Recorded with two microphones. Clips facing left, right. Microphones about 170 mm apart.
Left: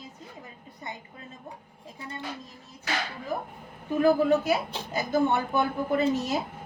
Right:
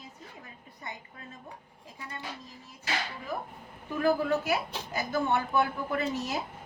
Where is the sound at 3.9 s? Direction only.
20° left (ahead or behind).